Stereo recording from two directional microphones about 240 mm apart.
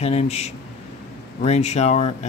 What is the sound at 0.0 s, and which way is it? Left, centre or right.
Speech, left.